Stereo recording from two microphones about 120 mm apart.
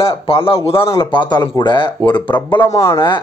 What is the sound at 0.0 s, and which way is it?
Speech, 50° left (ahead or behind).